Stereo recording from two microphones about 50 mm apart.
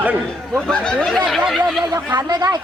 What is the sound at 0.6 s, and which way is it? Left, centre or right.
Speech, centre.